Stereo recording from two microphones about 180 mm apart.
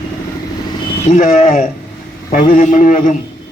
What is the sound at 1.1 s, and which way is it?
A man's voice, 45° left (ahead or behind).